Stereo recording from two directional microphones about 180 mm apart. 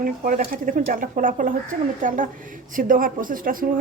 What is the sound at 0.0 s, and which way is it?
Speech, 50° right (ahead or behind).